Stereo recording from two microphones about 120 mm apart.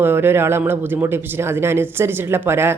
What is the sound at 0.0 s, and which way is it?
Speech, 20° right (ahead or behind).